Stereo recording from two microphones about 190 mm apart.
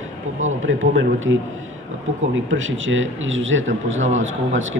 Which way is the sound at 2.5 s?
90° right.